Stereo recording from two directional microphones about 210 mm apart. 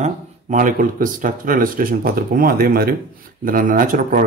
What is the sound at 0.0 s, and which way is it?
A man's voice, 35° right (ahead or behind).